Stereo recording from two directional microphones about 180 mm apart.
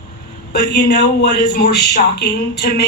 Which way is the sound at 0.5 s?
65° left (ahead or behind).